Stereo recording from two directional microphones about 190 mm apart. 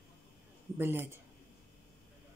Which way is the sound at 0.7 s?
10° right (ahead or behind).